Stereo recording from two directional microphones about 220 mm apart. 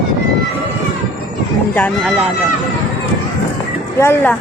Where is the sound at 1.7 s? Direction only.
5° left (ahead or behind).